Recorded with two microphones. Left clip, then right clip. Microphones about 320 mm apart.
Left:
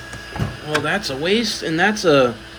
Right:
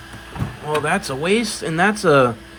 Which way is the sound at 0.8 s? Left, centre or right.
Centre.